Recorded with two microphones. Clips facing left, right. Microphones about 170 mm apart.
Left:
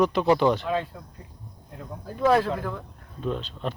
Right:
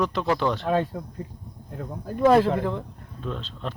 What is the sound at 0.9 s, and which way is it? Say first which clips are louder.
Speech: right 9 dB; 40° right (ahead or behind).